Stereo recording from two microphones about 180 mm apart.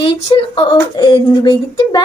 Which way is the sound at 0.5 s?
25° left (ahead or behind).